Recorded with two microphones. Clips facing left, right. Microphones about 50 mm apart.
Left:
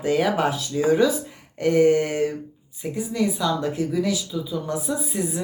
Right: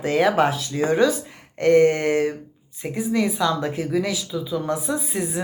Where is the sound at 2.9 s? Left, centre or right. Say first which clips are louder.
Right 3 dB; right.